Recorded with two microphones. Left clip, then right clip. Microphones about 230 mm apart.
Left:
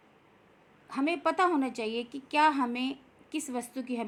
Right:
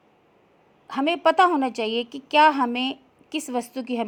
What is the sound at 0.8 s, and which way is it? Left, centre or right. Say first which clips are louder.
A woman's voice: right 9 dB; right.